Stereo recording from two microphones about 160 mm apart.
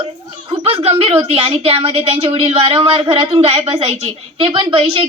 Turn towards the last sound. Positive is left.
turn(degrees=-35)  # may be behind; listen again after turning